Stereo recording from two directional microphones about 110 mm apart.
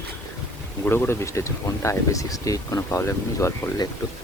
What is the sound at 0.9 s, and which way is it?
Speech, 20° left (ahead or behind).